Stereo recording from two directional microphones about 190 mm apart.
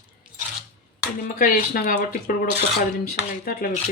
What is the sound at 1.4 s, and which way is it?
Speech, 50° left (ahead or behind).